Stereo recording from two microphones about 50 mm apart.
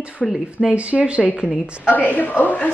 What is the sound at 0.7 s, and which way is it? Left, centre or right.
Speech, right.